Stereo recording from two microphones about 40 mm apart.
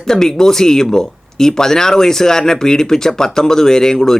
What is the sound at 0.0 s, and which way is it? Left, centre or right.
Speech, centre.